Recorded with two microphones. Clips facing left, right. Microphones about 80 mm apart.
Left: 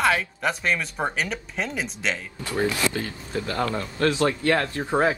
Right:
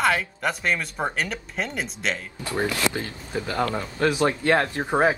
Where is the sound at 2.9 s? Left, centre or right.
Right.